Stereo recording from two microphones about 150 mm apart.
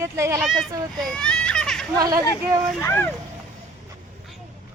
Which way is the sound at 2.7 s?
15° left (ahead or behind).